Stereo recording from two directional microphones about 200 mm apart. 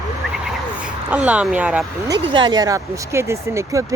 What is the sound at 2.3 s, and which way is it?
Speech, 20° right (ahead or behind).